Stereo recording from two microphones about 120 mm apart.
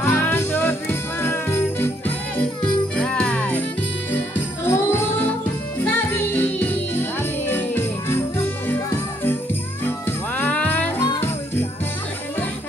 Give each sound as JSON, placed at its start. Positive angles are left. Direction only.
{"t": 0.0, "sound": "jingle bell", "side_deg": 15}
{"t": 4.1, "sound": "music", "side_deg": 20}
{"t": 9.8, "sound": "jingle bell", "side_deg": 15}